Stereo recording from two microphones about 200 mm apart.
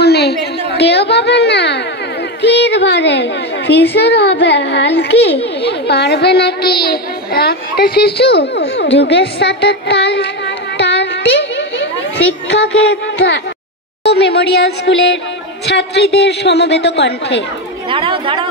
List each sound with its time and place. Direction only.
0.0 s a sound: 55° left (ahead or behind)
2.4 s a woman's voice: 60° left (ahead or behind)
5.1 s a child's voice: 30° left (ahead or behind)
5.6 s a child's voice: 55° left (ahead or behind)
9.0 s music: 55° left (ahead or behind)
12.9 s a sound: 55° left (ahead or behind)
14.0 s a woman's voice: 55° left (ahead or behind)
17.8 s speech: 25° right (ahead or behind)